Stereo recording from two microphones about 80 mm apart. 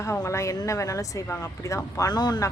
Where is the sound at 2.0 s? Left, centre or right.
Left.